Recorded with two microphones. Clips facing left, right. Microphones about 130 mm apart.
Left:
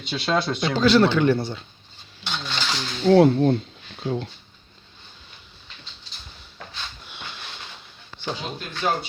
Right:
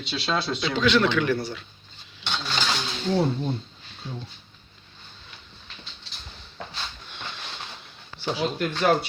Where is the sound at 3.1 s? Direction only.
80° left.